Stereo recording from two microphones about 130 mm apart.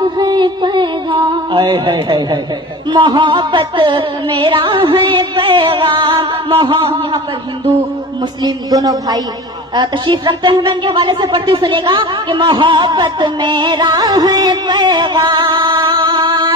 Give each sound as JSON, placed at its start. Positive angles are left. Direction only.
{"t": 0.2, "sound": "music", "side_deg": -35}
{"t": 1.5, "sound": "speech", "side_deg": -40}
{"t": 8.5, "sound": "a man's voice", "side_deg": -30}
{"t": 9.8, "sound": "speech", "side_deg": -40}